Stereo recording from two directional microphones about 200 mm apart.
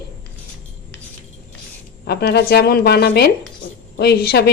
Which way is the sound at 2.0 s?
55° left (ahead or behind).